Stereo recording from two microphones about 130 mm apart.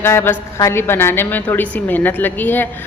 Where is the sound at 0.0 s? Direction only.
20° left (ahead or behind).